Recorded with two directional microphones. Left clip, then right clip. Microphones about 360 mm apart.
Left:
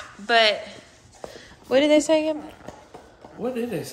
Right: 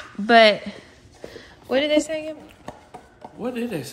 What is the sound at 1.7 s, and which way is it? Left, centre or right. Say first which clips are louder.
Speech: left 3 dB; centre.